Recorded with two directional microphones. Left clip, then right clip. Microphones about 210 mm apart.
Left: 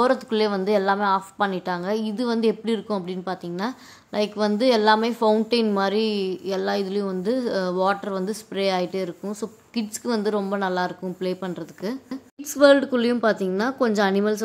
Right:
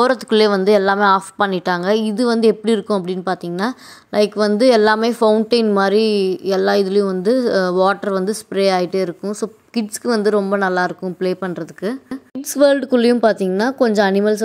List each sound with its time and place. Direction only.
0.0 s a woman's voice: 35° right (ahead or behind)